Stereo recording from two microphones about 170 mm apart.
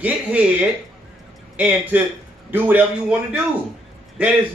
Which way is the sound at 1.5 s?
10° right (ahead or behind).